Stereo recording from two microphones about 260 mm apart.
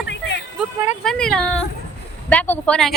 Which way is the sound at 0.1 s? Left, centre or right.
Left.